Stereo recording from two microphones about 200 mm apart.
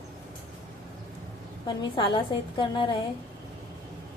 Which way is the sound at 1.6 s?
20° left (ahead or behind).